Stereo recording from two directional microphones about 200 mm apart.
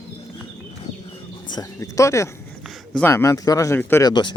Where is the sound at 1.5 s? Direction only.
20° left (ahead or behind).